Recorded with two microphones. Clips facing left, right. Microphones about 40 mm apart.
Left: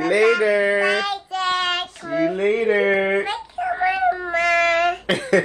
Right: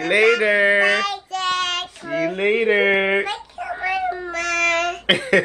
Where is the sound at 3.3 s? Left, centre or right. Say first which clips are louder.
Left 3 dB; left.